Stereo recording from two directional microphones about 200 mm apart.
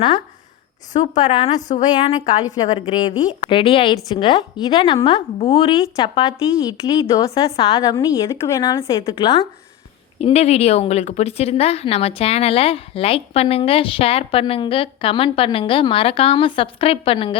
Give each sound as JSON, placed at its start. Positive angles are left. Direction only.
{"t": 1.2, "sound": "speech", "side_deg": 25}
{"t": 1.8, "sound": "speech", "side_deg": 20}
{"t": 5.8, "sound": "speech", "side_deg": 20}